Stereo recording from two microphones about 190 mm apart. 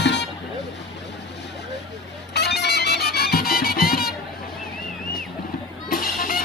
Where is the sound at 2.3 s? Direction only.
60° left (ahead or behind).